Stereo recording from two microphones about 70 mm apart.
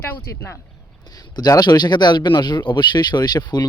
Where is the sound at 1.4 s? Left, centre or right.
Left.